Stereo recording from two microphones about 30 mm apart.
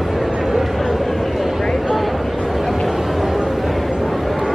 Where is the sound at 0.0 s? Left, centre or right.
Centre.